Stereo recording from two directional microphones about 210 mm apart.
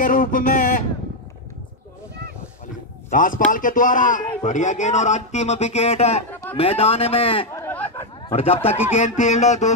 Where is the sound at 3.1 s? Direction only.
40° left (ahead or behind).